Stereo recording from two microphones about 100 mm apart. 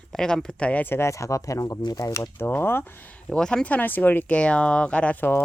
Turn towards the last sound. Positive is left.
turn(degrees=20)  # may be behind; listen again after turning